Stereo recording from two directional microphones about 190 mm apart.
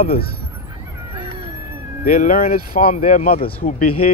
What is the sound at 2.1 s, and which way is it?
Speech, 45° left (ahead or behind).